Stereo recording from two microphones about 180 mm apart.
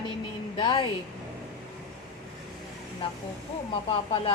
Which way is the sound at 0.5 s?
25° left (ahead or behind).